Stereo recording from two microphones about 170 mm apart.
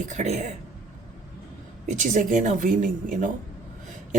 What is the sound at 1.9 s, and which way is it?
Speech, 45° right (ahead or behind).